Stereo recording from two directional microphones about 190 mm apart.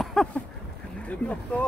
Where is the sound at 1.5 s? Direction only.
5° left (ahead or behind).